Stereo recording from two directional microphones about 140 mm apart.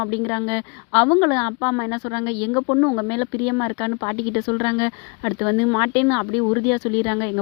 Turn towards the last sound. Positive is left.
turn(degrees=30)  # may be behind; listen again after turning